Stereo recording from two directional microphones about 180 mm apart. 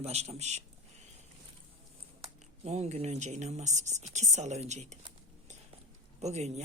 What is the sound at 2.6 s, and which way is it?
Speech, 35° right (ahead or behind).